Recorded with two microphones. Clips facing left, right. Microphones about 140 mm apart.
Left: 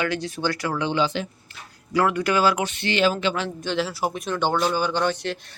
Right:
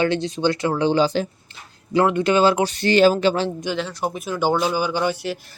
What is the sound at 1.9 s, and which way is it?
Speech, 25° right (ahead or behind).